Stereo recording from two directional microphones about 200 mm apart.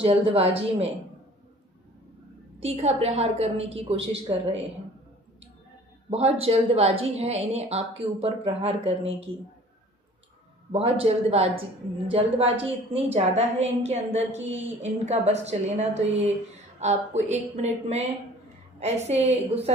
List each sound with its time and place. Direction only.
0.0 s a woman's voice: 30° right (ahead or behind)
2.6 s a woman's voice: 30° right (ahead or behind)
6.1 s a woman's voice: 30° right (ahead or behind)
10.7 s a woman's voice: 30° right (ahead or behind)